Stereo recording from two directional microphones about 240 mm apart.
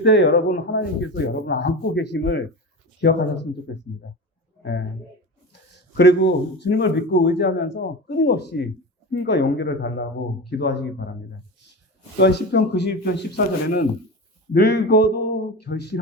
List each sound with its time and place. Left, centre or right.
0.0 s speech: left
5.7 s speech: left
12.1 s speech: left